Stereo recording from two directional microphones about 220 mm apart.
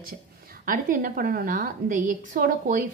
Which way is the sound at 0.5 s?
40° right (ahead or behind).